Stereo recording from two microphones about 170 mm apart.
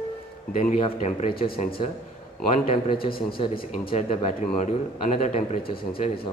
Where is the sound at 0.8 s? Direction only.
40° left (ahead or behind).